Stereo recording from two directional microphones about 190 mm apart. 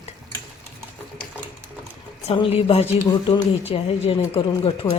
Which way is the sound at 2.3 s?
30° left (ahead or behind).